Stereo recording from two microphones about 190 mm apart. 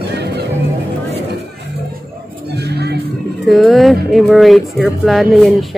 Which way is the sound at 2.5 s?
60° right (ahead or behind).